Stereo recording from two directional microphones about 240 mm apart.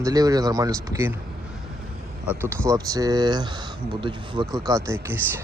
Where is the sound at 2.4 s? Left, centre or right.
Centre.